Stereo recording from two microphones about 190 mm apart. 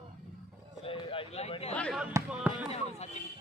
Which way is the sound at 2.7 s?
35° left (ahead or behind).